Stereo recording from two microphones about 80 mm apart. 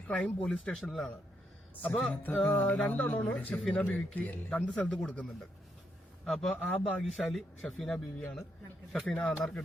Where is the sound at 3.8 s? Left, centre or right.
Left.